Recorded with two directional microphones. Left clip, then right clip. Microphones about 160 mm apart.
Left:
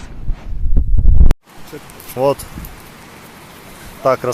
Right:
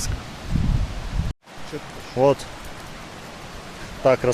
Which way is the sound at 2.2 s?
5° right (ahead or behind).